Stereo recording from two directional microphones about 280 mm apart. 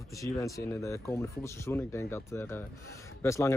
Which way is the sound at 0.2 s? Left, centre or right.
Centre.